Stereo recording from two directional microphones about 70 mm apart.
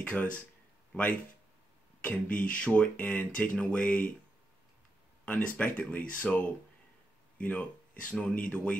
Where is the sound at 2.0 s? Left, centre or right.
Centre.